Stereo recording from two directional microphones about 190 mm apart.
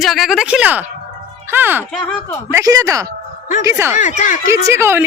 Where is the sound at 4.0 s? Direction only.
40° left (ahead or behind).